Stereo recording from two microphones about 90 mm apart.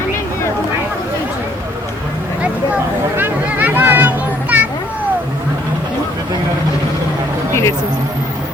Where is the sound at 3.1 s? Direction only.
20° right (ahead or behind).